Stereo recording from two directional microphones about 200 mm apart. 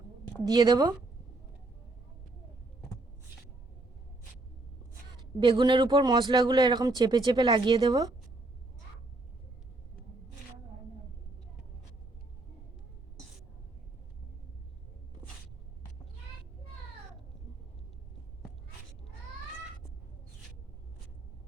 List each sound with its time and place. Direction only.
0.4 s speech: 20° right (ahead or behind)
5.1 s speech: 25° right (ahead or behind)